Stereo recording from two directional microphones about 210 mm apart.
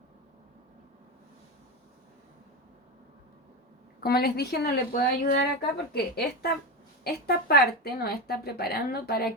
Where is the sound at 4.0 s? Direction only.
50° left (ahead or behind).